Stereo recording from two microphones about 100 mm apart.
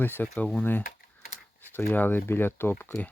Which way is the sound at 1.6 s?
20° left (ahead or behind).